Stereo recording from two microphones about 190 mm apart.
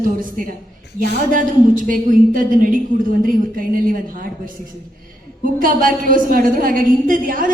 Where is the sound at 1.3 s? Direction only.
45° right (ahead or behind).